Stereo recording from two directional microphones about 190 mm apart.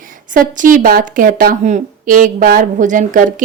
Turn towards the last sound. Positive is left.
turn(degrees=-45)  # may be behind; listen again after turning